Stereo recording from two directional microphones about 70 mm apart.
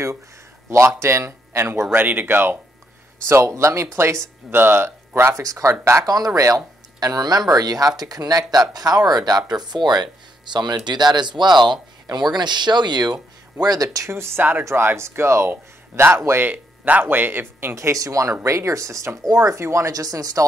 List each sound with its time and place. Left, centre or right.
0.7 s speech: right
5.3 s speech: right
6.0 s speech: right
9.5 s a man's voice: right
13.9 s speech: right
16.4 s speech: right
17.9 s speech: right
18.4 s speech: right
19.2 s speech: right
19.6 s speech: right
19.9 s speech: right